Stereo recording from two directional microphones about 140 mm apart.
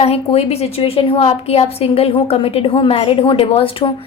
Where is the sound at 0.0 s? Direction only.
45° left (ahead or behind).